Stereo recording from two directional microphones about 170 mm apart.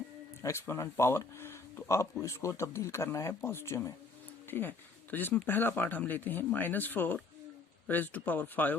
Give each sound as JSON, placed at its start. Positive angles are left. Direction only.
{"t": 0.4, "sound": "speech", "side_deg": 15}